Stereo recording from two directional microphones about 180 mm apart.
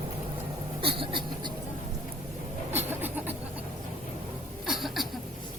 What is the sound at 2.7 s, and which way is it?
Vehicle, 10° right (ahead or behind).